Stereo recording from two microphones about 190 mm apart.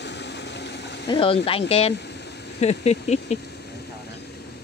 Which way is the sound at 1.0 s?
25° left (ahead or behind).